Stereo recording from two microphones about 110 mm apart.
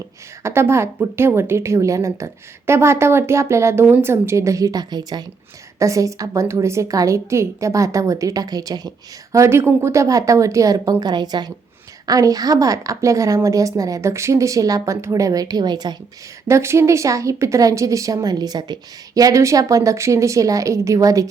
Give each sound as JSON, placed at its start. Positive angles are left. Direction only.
{"t": 0.4, "sound": "a woman's voice", "side_deg": -25}
{"t": 9.3, "sound": "a woman's voice", "side_deg": -25}
{"t": 16.5, "sound": "a woman's voice", "side_deg": -25}